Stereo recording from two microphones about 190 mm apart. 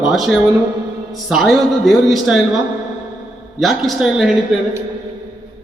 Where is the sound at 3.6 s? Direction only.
Centre (ahead or behind).